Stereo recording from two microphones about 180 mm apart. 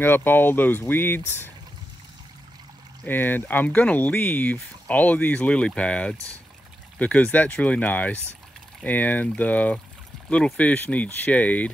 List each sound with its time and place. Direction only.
0.0 s speech: 10° left (ahead or behind)
3.0 s speech: 10° left (ahead or behind)